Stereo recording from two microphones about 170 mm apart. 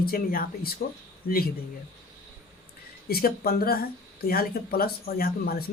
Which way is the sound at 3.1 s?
65° left (ahead or behind).